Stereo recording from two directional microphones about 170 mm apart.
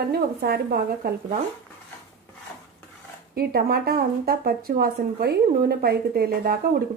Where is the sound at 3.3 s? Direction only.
60° right (ahead or behind).